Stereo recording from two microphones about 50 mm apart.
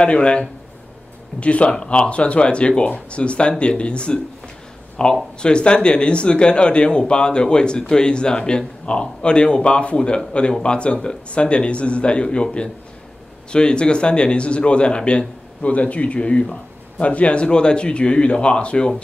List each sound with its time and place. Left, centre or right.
0.0 s speech: left